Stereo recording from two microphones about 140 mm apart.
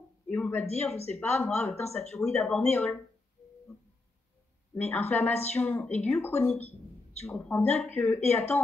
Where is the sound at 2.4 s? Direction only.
5° left (ahead or behind).